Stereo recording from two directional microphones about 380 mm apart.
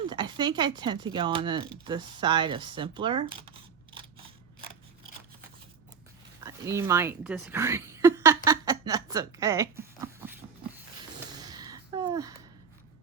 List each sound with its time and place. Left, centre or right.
0.1 s speech: centre
6.4 s speech: centre
11.3 s a sound: centre